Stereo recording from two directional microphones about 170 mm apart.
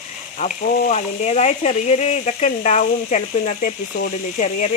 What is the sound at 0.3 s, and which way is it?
Speech, 45° left (ahead or behind).